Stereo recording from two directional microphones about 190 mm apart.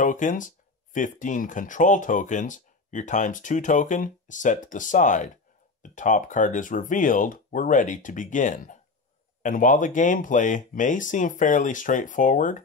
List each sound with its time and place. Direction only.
0.0 s speech: 45° left (ahead or behind)